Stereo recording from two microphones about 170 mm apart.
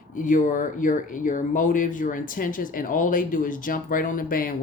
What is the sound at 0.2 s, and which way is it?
Speech, 50° left (ahead or behind).